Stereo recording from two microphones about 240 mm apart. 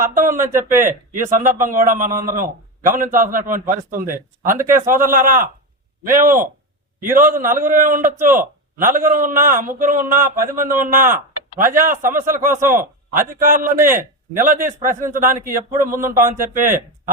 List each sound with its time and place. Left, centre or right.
0.1 s a man's voice: right
0.4 s speech: centre
0.8 s a man's voice: right
4.9 s speech: centre
5.1 s a man's voice: right